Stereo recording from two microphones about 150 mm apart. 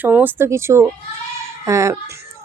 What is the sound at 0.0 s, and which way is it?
A woman's voice, 10° right (ahead or behind).